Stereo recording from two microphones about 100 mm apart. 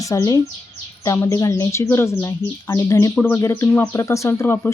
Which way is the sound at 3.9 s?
30° left (ahead or behind).